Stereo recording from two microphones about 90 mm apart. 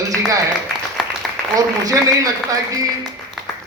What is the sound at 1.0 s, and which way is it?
Applause, 5° left (ahead or behind).